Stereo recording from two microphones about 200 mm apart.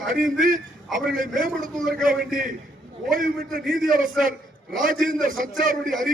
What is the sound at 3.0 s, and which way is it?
Speech, 45° right (ahead or behind).